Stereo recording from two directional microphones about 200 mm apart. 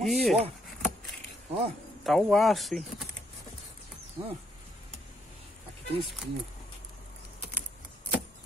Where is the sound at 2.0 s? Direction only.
Centre (ahead or behind).